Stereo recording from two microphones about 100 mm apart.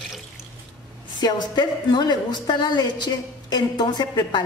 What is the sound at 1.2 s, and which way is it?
A woman's voice, 45° left (ahead or behind).